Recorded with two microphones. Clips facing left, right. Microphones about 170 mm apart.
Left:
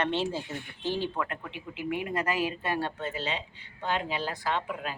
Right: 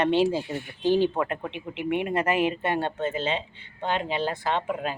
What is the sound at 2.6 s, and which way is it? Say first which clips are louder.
Speech: right 5 dB; 25° right (ahead or behind).